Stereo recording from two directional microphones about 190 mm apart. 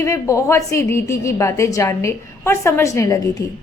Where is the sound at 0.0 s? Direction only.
15° left (ahead or behind).